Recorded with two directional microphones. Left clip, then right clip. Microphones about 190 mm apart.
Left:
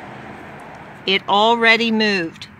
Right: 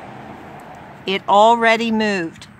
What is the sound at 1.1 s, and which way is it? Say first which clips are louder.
Speech: right 2 dB; centre (ahead or behind).